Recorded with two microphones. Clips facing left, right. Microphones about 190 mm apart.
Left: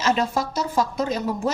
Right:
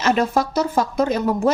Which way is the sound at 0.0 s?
60° right (ahead or behind).